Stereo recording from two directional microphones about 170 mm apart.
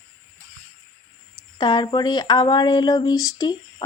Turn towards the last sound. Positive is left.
turn(degrees=20)  # may be behind; listen again after turning